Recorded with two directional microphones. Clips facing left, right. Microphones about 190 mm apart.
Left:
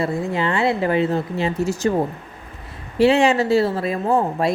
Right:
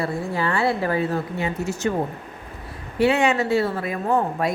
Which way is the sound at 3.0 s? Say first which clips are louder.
Left 4 dB; 30° left (ahead or behind).